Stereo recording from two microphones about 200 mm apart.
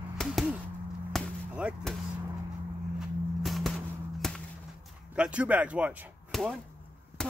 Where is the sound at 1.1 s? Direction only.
Centre (ahead or behind).